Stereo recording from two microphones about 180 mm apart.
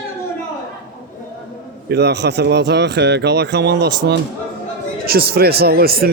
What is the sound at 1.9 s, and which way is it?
Speech, 65° right (ahead or behind).